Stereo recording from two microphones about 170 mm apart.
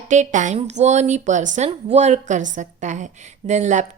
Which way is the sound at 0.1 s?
45° right (ahead or behind).